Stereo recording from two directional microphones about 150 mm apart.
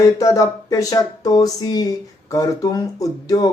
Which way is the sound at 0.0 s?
20° left (ahead or behind).